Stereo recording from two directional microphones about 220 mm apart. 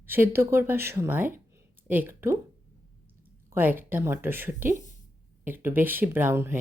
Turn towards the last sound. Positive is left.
turn(degrees=-10)  # may be behind; listen again after turning